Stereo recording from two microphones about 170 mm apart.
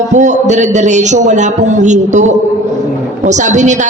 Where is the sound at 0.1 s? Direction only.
45° right (ahead or behind).